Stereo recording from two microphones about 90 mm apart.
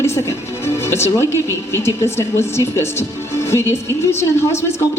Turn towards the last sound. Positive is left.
turn(degrees=30)  # may be behind; listen again after turning